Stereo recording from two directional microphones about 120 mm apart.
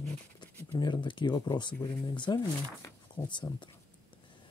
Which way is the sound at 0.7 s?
40° left (ahead or behind).